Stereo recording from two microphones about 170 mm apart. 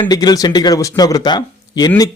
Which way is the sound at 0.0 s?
25° left (ahead or behind).